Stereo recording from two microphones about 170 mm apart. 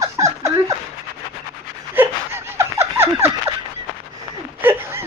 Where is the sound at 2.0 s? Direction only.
15° right (ahead or behind).